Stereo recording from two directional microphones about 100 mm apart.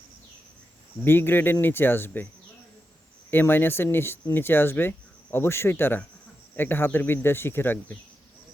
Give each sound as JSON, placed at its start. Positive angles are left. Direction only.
{"t": 1.0, "sound": "speech", "side_deg": 20}
{"t": 3.2, "sound": "speech", "side_deg": 20}